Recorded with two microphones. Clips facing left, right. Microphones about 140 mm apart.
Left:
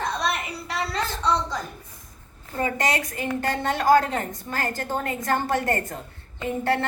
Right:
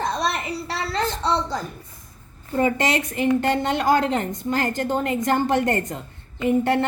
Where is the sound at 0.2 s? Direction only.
30° right (ahead or behind).